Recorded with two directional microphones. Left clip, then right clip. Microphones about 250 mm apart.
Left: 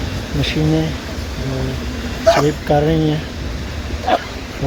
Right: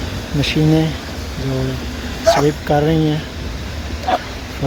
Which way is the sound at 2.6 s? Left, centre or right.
Centre.